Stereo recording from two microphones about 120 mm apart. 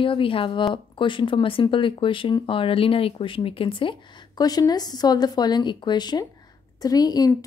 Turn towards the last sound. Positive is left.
turn(degrees=35)  # may be behind; listen again after turning